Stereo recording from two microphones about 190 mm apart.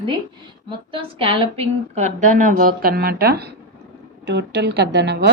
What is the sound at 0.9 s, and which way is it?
A woman's voice, 30° right (ahead or behind).